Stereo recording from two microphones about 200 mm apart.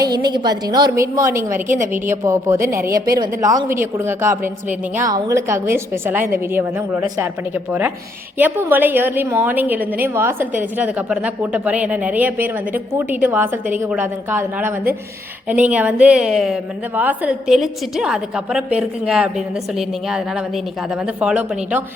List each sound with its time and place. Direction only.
0.0 s a woman's voice: 20° right (ahead or behind)